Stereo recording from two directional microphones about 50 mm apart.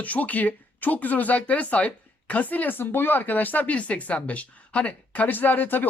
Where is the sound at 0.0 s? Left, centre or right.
Left.